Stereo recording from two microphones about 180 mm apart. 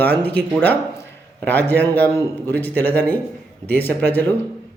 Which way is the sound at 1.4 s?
10° left (ahead or behind).